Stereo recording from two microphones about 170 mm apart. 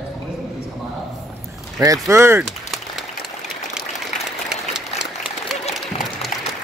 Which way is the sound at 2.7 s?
Centre (ahead or behind).